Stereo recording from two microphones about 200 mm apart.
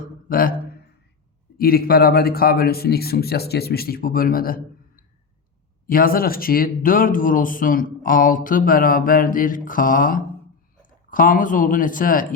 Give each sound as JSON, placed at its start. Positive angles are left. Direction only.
{"t": 0.3, "sound": "speech", "side_deg": 45}
{"t": 1.5, "sound": "speech", "side_deg": 50}
{"t": 5.8, "sound": "speech", "side_deg": 45}